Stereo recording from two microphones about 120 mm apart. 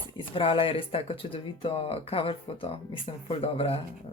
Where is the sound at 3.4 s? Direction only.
55° left (ahead or behind).